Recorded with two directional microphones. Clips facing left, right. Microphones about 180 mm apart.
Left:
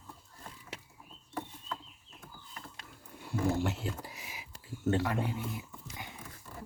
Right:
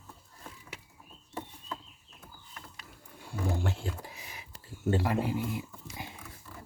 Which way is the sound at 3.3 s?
5° left (ahead or behind).